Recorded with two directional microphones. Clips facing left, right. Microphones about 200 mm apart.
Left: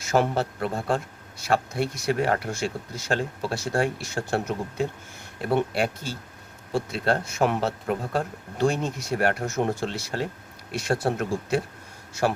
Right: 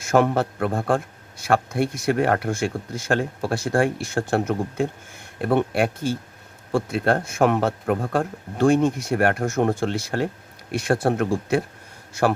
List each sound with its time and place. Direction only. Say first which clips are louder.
0.0 s a man's voice: right 4 dB; 55° right (ahead or behind)